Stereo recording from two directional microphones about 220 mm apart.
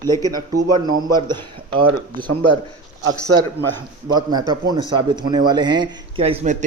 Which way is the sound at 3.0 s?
65° right (ahead or behind).